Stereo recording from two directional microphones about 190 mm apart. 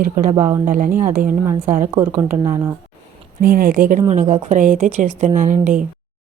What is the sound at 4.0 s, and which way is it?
Speech, 35° right (ahead or behind).